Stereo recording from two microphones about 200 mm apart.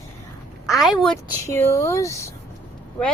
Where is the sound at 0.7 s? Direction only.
Centre (ahead or behind).